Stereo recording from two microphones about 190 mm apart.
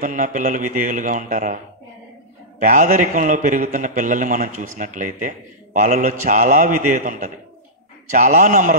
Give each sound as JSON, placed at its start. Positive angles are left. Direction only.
{"t": 0.0, "sound": "a man's voice", "side_deg": -45}
{"t": 2.6, "sound": "a man's voice", "side_deg": -40}